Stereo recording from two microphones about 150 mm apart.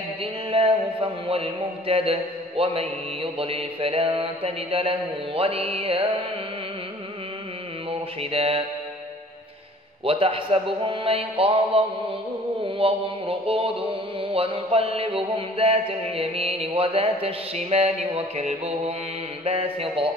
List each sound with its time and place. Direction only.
0.2 s mantra: 40° right (ahead or behind)
8.2 s mantra: 40° right (ahead or behind)
10.0 s mantra: 35° right (ahead or behind)